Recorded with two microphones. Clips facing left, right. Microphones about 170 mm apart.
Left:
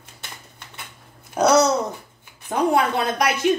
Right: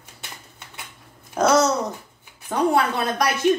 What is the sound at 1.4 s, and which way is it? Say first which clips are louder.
A woman's voice: left 1 dB; 10° left (ahead or behind).